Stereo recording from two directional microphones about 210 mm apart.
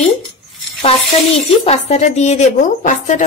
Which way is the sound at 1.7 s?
30° left (ahead or behind).